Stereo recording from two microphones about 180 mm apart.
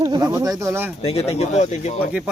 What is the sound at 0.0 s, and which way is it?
Speech, 20° right (ahead or behind).